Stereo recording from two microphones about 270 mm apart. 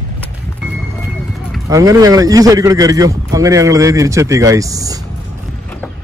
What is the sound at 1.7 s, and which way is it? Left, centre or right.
A man's voice, centre.